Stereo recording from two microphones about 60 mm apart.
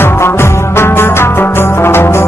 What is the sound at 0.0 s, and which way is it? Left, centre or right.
Music, left.